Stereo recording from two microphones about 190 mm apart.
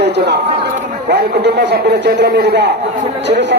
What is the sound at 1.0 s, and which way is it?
Speech, 60° right (ahead or behind).